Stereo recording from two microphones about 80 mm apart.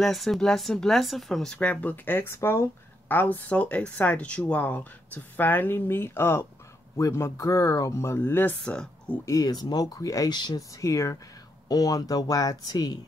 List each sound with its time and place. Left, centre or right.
0.0 s speech: centre
1.6 s speech: centre; by 2.7 s left
3.1 s speech: left
8.6 s speech: centre
9.2 s speech: left
10.3 s speech: left
10.8 s speech: left
11.7 s speech: left